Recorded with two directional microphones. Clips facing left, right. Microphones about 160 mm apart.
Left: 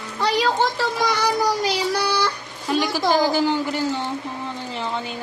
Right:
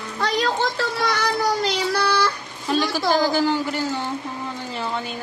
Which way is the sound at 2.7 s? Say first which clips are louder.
Left 1 dB; 15° left (ahead or behind).